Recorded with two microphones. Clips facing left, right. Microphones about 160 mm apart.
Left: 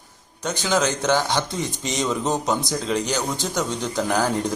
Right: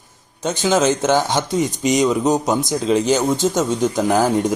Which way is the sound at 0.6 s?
20° right (ahead or behind).